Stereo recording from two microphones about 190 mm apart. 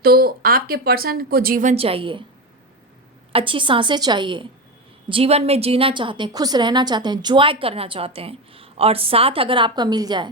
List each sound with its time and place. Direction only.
0.0 s a woman's voice: 55° right (ahead or behind)
1.7 s a woman's voice: 30° right (ahead or behind)
3.3 s a woman's voice: 25° right (ahead or behind)